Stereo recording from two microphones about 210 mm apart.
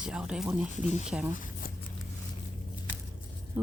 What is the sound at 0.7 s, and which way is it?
Speech, 35° left (ahead or behind).